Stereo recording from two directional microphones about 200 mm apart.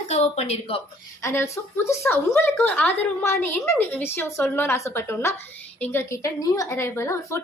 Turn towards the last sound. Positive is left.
turn(degrees=15)  # may be behind; listen again after turning